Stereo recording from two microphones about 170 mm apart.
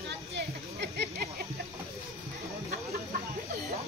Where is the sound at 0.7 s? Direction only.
80° right.